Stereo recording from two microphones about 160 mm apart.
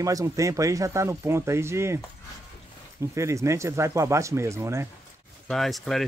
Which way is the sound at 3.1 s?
20° right (ahead or behind).